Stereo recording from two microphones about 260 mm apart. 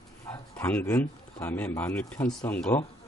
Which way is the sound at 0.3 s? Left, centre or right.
Centre.